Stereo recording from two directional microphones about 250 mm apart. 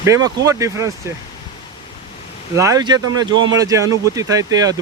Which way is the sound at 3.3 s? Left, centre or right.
Right.